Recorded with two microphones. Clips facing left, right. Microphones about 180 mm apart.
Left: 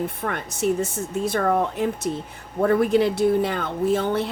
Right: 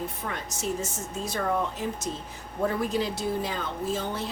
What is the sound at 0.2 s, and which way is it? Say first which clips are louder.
Speech: left 8 dB; 60° left (ahead or behind).